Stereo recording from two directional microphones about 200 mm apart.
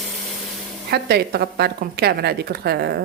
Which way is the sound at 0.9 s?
55° right (ahead or behind).